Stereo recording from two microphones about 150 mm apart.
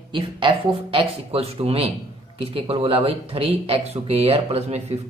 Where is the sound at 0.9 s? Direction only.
40° right (ahead or behind).